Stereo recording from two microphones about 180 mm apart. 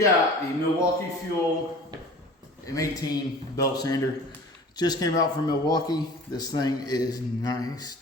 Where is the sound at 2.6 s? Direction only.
20° left (ahead or behind).